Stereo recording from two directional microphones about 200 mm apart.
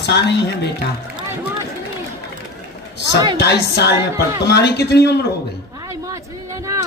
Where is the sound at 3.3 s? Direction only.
55° left (ahead or behind).